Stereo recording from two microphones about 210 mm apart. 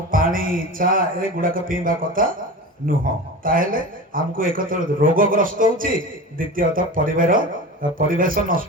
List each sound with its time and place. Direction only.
0.1 s a man's voice: 40° right (ahead or behind)